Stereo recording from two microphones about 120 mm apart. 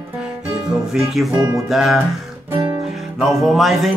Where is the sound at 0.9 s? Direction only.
Centre (ahead or behind).